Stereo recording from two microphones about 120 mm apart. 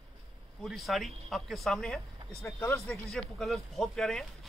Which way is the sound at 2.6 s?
20° left (ahead or behind).